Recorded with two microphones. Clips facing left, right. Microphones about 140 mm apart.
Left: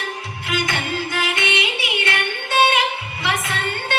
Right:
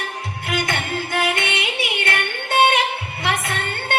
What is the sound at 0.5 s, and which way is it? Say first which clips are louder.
Music: even; 55° right (ahead or behind).